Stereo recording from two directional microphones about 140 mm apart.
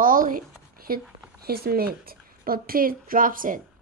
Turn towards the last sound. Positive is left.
turn(degrees=-75)  # may be behind; listen again after turning